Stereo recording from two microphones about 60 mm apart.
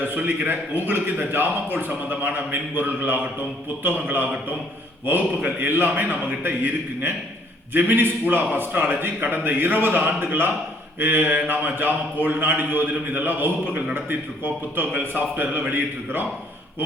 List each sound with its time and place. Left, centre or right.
0.0 s a man's voice: right